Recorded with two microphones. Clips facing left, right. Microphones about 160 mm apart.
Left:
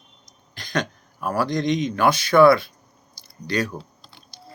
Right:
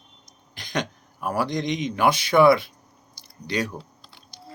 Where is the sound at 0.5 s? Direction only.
20° right (ahead or behind).